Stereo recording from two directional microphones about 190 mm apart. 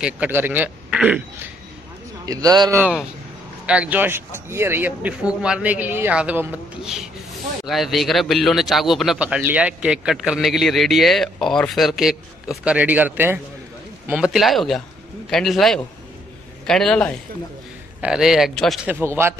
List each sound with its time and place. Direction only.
0.0 s speech: 10° right (ahead or behind)
2.2 s a man's voice: 20° right (ahead or behind)
2.8 s a man's voice: 5° right (ahead or behind)